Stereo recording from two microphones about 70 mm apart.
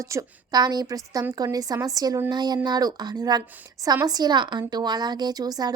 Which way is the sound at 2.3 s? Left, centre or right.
Right.